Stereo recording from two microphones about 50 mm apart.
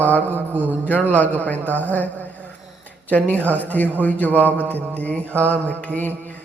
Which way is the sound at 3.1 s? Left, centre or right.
Left.